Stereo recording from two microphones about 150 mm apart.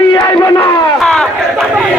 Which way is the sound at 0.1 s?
25° left (ahead or behind).